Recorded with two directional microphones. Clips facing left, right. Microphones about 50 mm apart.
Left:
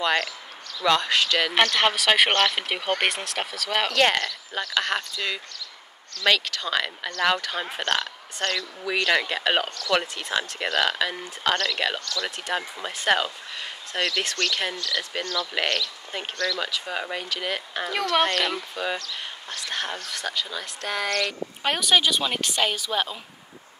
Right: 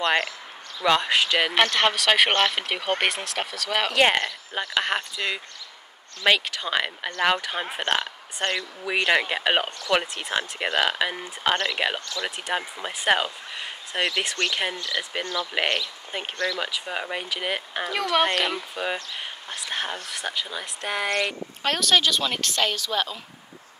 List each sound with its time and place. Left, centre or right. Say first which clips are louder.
0.0 s speech: right 1 dB; centre
1.5 s speech: even; centre
3.9 s speech: right 2 dB; centre
21.6 s a woman's voice: even; centre